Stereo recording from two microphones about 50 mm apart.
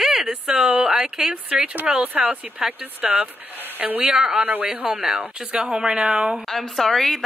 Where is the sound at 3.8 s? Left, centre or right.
Right.